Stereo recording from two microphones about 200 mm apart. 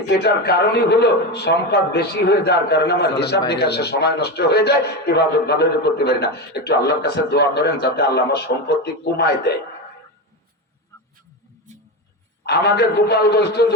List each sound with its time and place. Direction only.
0.1 s a man's voice: 55° left (ahead or behind)
12.5 s a man's voice: 55° left (ahead or behind)